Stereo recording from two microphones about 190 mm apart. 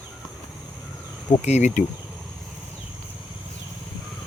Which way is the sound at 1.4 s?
35° left (ahead or behind).